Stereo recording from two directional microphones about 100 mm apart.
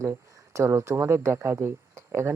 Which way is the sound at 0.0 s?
25° right (ahead or behind).